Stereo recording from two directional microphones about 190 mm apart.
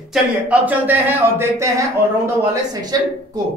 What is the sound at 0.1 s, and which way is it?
Speech, 10° right (ahead or behind).